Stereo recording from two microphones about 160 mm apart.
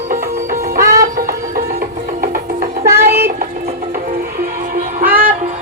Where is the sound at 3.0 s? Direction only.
75° right (ahead or behind).